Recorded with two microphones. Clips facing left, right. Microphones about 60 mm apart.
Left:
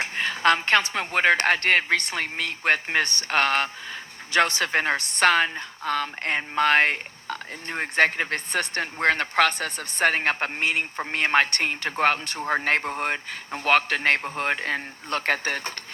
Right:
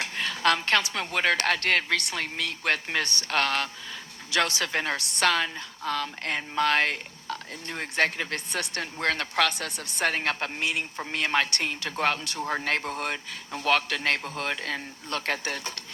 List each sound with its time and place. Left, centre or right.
0.0 s a woman's voice: left